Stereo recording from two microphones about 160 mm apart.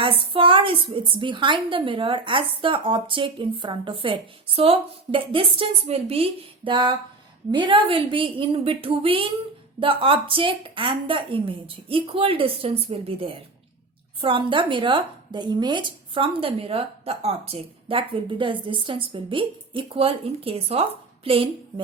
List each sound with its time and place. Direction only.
0.0 s a woman's voice: 35° right (ahead or behind)